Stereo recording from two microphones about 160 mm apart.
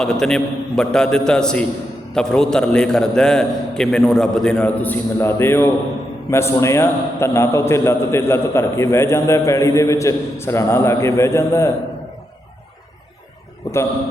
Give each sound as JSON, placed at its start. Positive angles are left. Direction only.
{"t": 0.0, "sound": "a man's voice", "side_deg": 5}